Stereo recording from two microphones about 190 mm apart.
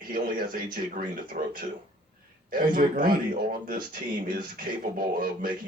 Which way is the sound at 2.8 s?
45° right (ahead or behind).